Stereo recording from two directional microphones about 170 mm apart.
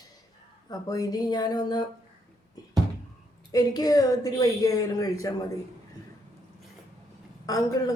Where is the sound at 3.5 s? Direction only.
20° left (ahead or behind).